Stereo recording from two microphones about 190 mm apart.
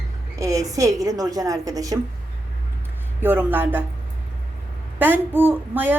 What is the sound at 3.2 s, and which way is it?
Speech, 10° right (ahead or behind).